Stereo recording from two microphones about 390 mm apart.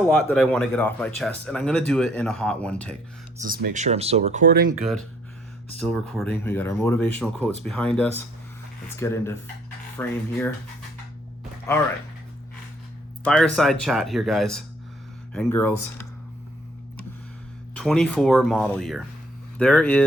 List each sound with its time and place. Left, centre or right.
0.0 s speech: centre
3.4 s speech: right
4.8 s speech: centre
13.2 s speech: centre
17.7 s speech: centre